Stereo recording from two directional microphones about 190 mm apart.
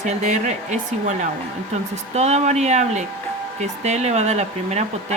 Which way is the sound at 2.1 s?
35° right (ahead or behind).